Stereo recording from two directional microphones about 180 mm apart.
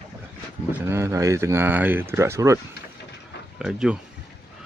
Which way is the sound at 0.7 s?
15° right (ahead or behind).